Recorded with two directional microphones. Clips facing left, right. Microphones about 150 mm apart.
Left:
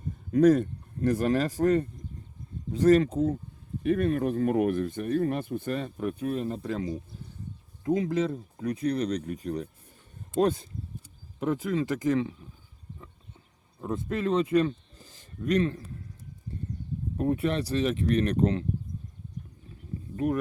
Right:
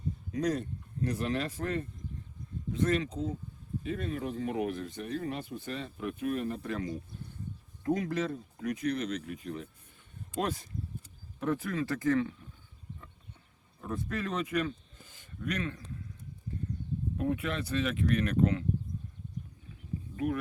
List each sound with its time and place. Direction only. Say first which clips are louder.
0.3 s speech: left 12 dB; 55° left (ahead or behind)
10.3 s speech: left 9 dB; 30° left (ahead or behind)
11.3 s speech: left 4 dB; 20° left (ahead or behind)
13.8 s a man's voice: left 6 dB; 25° left (ahead or behind)
17.2 s speech: left 6 dB; 35° left (ahead or behind)
20.1 s speech: left 5 dB; 40° left (ahead or behind)